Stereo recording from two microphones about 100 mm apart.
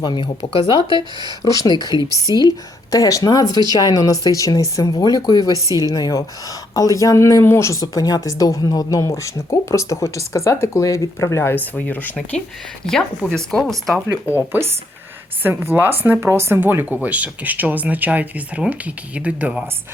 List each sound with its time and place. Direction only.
0.0 s speech: 55° left (ahead or behind)
0.9 s speech: 45° right (ahead or behind)
1.6 s speech: 50° left (ahead or behind)
5.5 s speech: 35° right (ahead or behind)
5.8 s speech: 35° left (ahead or behind); by 12.1 s 20° left (ahead or behind)
12.9 s speech: 5° left (ahead or behind)
14.1 s speech: 25° left (ahead or behind)
15.4 s speech: 20° right (ahead or behind)